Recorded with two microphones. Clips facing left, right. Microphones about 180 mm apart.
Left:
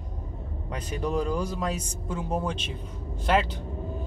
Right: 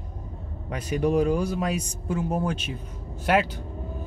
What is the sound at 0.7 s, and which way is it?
Speech, 10° right (ahead or behind).